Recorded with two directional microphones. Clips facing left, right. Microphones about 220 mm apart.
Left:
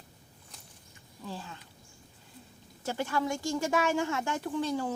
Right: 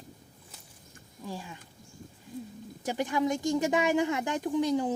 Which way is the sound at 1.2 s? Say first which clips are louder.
Right 2 dB; 15° right (ahead or behind).